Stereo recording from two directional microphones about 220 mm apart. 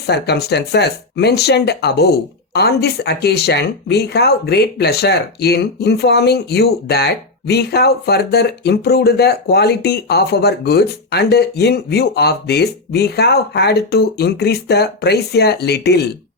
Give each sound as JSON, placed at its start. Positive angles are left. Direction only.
{"t": 0.1, "sound": "speech", "side_deg": 50}